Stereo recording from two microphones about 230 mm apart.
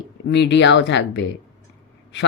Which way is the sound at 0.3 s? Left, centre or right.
Left.